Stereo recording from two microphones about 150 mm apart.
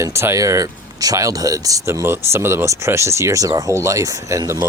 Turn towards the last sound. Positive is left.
turn(degrees=-20)  # may be behind; listen again after turning